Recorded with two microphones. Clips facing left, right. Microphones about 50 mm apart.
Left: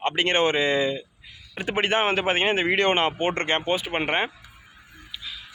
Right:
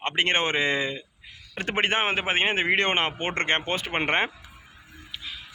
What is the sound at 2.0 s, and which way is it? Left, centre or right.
Speech, right.